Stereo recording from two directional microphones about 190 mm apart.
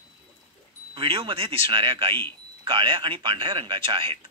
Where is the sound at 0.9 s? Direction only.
30° right (ahead or behind).